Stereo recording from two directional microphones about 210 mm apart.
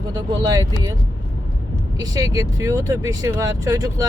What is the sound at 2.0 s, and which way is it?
Speech, 15° right (ahead or behind).